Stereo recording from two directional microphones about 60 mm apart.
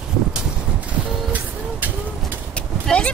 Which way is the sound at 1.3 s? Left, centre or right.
Right.